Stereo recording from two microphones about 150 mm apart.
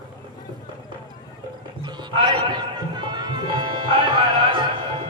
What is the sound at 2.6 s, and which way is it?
Music, 30° right (ahead or behind).